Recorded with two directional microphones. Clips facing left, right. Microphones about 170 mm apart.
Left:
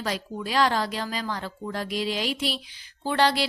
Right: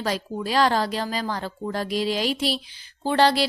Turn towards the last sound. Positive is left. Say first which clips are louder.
# right 3 dB
turn(degrees=-35)  # may be behind; listen again after turning